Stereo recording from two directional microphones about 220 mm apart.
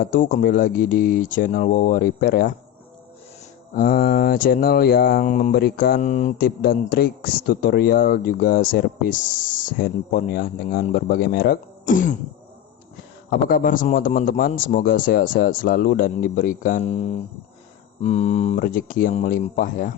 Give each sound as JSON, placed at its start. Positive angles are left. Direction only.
{"t": 0.0, "sound": "speech", "side_deg": 40}
{"t": 3.8, "sound": "speech", "side_deg": 40}
{"t": 13.3, "sound": "speech", "side_deg": 40}
{"t": 18.0, "sound": "speech", "side_deg": 30}